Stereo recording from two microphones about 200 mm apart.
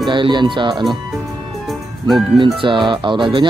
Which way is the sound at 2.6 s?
25° right (ahead or behind).